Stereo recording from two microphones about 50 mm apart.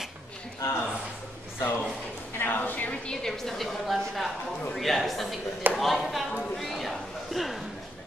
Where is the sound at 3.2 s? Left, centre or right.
Centre.